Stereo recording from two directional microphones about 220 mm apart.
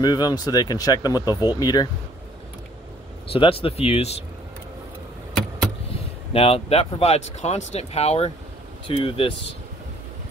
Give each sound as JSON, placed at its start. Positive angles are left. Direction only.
{"t": 0.0, "sound": "speech", "side_deg": 20}
{"t": 1.3, "sound": "speech", "side_deg": -10}
{"t": 1.6, "sound": "speech", "side_deg": 15}
{"t": 3.3, "sound": "speech", "side_deg": 25}
{"t": 6.3, "sound": "speech", "side_deg": 25}